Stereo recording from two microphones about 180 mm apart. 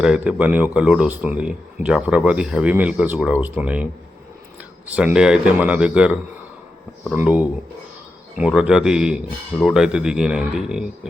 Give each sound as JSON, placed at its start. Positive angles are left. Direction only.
{"t": 0.0, "sound": "speech", "side_deg": -5}
{"t": 4.9, "sound": "speech", "side_deg": -5}